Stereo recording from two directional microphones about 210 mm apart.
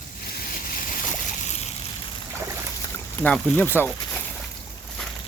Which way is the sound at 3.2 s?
5° left (ahead or behind).